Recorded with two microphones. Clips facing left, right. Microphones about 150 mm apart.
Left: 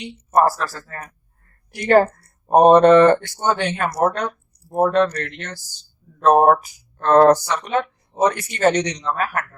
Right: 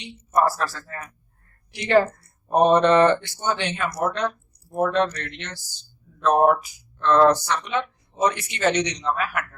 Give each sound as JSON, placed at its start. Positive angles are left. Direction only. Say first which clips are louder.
{"t": 0.3, "sound": "speech", "louder": "left 4 dB", "side_deg": 45}